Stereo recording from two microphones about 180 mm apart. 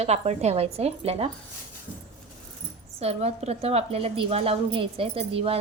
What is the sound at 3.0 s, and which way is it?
A woman's voice, 35° right (ahead or behind).